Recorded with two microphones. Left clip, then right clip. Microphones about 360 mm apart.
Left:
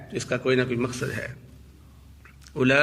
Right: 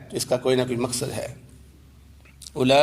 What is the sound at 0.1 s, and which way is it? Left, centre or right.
Mantra, centre.